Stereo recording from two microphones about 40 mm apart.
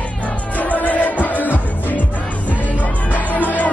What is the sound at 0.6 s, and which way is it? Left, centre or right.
Music, left.